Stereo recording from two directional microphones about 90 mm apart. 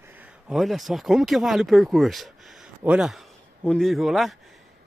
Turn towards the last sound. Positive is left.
turn(degrees=0)  # may be behind; listen again after turning